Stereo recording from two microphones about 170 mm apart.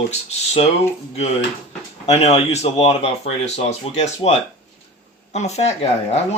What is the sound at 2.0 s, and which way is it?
Speech, 40° left (ahead or behind).